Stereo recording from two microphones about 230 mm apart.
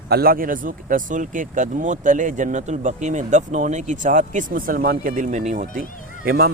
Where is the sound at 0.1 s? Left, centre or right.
Right.